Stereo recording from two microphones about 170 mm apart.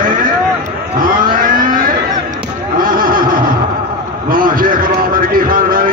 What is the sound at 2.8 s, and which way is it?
Neigh, 55° right (ahead or behind).